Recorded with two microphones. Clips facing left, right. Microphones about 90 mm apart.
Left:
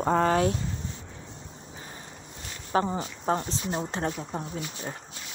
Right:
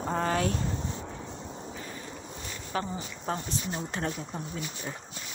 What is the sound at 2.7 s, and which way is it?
Speech, 40° left (ahead or behind).